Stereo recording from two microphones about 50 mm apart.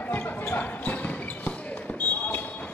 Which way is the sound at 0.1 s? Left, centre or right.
Left.